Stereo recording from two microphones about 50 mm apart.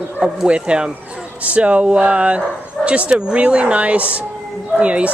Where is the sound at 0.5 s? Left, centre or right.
Right.